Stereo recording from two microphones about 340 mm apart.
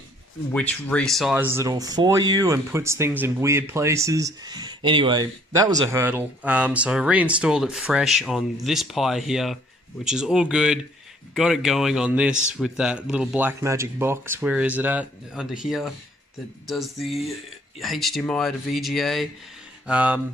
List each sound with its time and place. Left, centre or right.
0.5 s speech: centre